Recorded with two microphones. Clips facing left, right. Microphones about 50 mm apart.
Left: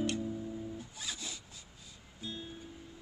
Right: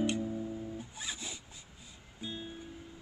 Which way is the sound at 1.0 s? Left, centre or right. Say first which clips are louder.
Right 1 dB; centre.